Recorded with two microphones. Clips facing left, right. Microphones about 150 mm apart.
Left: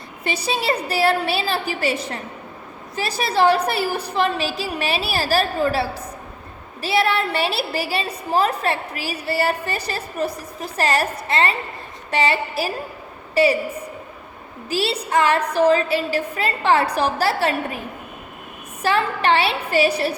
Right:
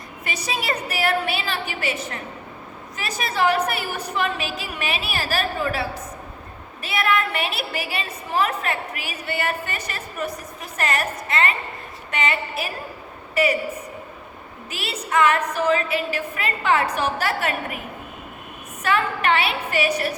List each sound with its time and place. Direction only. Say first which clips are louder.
0.3 s a woman's voice: left 5 dB; 30° left (ahead or behind)
14.7 s a woman's voice: left 5 dB; 35° left (ahead or behind)